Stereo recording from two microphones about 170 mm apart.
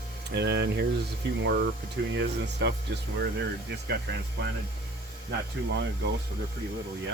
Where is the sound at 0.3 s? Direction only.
85° right.